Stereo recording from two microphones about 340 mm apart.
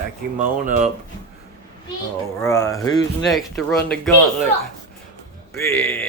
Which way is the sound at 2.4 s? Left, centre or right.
Centre.